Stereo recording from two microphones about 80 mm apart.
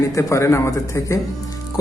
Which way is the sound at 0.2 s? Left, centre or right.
Left.